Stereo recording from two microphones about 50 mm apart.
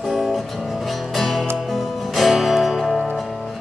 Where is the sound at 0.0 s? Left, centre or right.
Centre.